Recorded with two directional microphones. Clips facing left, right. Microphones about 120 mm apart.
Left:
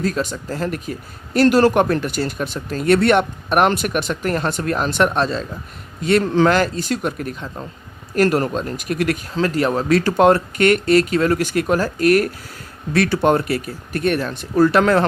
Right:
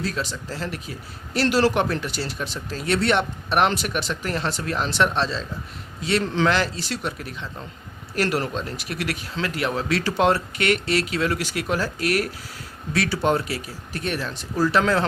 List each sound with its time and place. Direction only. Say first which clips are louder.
0.0 s speech: left 6 dB; 50° left (ahead or behind)